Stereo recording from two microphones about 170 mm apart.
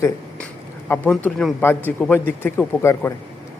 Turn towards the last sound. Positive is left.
turn(degrees=15)  # may be behind; listen again after turning